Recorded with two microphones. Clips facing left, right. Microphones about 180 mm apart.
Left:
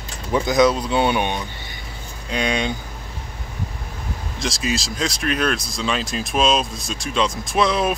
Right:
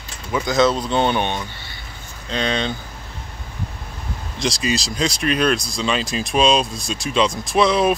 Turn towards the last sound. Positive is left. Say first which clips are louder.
# right 3 dB
turn(degrees=0)  # may be behind; listen again after turning